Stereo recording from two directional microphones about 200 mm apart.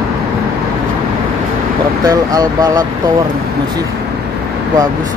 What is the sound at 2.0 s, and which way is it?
Speech, 20° right (ahead or behind).